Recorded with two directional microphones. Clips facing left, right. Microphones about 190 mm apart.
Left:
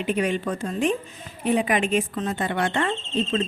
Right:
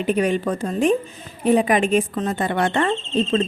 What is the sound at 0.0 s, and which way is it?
Speech, 40° right (ahead or behind).